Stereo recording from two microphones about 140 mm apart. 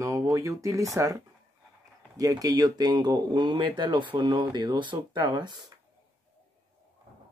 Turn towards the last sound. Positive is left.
turn(degrees=-35)  # may be behind; listen again after turning